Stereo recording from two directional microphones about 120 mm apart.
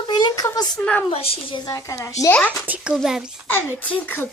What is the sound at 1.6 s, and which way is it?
Speech, 30° left (ahead or behind).